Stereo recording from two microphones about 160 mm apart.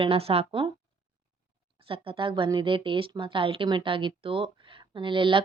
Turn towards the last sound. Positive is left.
turn(degrees=-30)  # may be behind; listen again after turning